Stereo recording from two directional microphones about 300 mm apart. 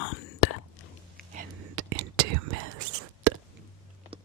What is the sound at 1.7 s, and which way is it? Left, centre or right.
Whispering, right.